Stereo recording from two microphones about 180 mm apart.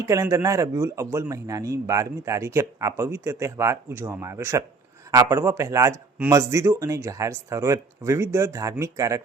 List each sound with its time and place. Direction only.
0.0 s speech: 20° right (ahead or behind)